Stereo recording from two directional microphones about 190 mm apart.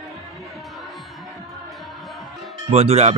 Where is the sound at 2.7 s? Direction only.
35° right (ahead or behind).